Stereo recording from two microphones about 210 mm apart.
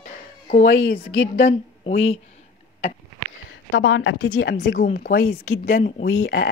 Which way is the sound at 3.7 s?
70° left (ahead or behind).